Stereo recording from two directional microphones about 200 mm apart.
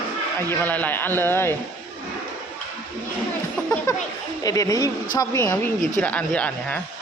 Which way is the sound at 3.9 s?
15° left (ahead or behind).